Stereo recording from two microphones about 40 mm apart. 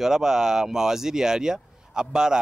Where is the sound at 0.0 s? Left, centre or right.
Centre.